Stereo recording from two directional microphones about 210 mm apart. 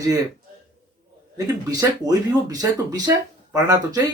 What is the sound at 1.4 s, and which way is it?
Speech, 15° right (ahead or behind).